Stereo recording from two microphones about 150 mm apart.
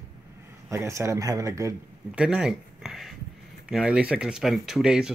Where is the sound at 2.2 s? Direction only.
5° right (ahead or behind).